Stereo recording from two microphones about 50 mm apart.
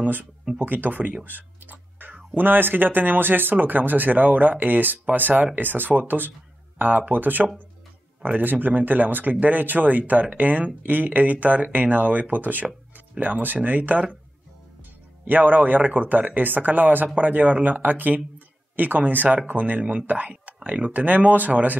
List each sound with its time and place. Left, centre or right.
0.0 s speech: right
1.2 s a sound: right
2.3 s speech: right
15.2 s speech: right